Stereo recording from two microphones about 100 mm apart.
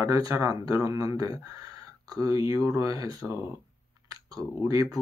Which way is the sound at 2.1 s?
35° right (ahead or behind).